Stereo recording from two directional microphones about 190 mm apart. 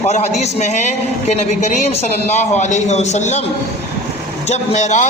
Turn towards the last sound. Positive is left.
turn(degrees=40)  # may be behind; listen again after turning